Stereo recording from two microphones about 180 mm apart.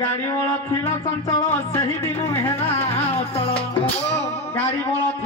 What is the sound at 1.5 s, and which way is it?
Speech, 15° left (ahead or behind).